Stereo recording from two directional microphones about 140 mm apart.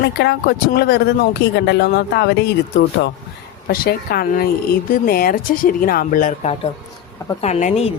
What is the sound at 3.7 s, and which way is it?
A woman's voice, 90° left.